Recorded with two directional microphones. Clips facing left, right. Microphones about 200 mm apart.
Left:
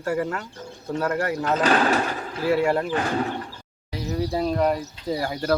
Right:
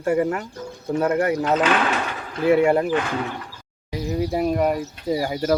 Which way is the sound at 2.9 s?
35° left (ahead or behind).